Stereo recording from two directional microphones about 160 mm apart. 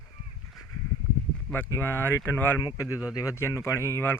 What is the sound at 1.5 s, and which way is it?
Speech, 15° left (ahead or behind).